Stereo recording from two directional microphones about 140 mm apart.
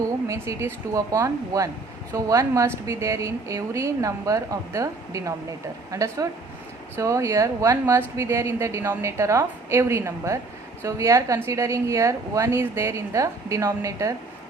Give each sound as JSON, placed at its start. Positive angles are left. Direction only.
{"t": 0.3, "sound": "a woman's voice", "side_deg": -20}